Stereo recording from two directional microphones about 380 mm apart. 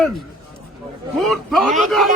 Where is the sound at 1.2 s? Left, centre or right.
Centre.